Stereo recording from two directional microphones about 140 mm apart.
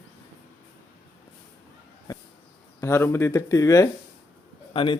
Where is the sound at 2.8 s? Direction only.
20° left (ahead or behind).